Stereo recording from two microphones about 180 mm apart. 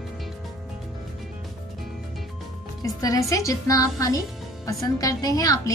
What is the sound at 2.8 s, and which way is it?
A woman's voice, 20° left (ahead or behind).